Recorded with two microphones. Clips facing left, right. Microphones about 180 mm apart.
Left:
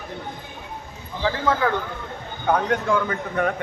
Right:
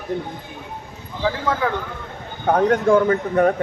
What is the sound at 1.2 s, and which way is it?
Speech, 5° right (ahead or behind).